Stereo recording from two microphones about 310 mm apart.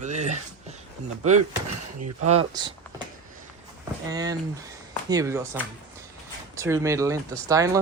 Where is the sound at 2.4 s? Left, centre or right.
Centre.